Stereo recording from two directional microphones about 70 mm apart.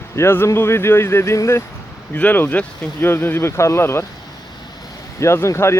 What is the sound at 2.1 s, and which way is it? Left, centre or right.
Speech, left.